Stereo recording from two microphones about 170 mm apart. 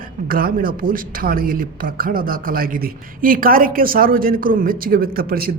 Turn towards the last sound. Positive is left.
turn(degrees=-60)  # may be behind; listen again after turning